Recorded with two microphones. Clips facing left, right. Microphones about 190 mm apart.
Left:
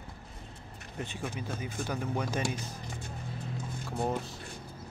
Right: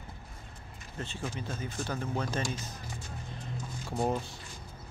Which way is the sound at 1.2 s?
60° left (ahead or behind).